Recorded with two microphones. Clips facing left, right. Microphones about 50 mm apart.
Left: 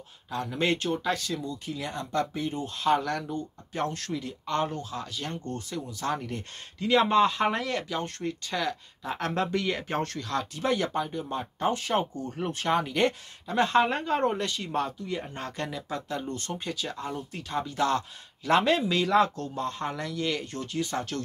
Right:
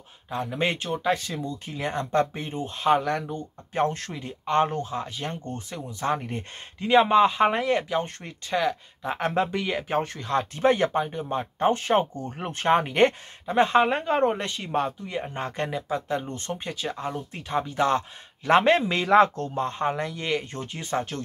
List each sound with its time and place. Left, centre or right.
0.3 s speech: right
7.1 s speech: centre
10.1 s speech: right